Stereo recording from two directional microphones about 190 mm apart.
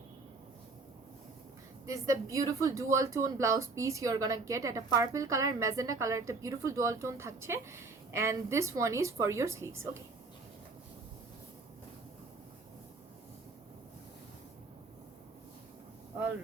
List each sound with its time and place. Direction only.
1.9 s speech: 15° right (ahead or behind)